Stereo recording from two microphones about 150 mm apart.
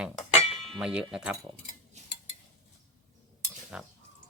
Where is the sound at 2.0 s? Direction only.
50° right (ahead or behind).